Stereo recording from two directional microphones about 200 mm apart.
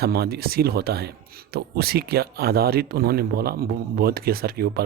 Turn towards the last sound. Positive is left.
turn(degrees=-50)  # may be behind; listen again after turning